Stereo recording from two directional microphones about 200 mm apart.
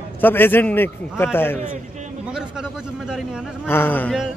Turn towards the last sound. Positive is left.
turn(degrees=10)  # may be behind; listen again after turning